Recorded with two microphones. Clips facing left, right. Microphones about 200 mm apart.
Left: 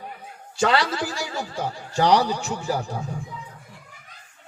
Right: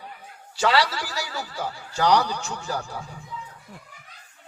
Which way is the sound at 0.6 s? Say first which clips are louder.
Left 1 dB; 50° left (ahead or behind).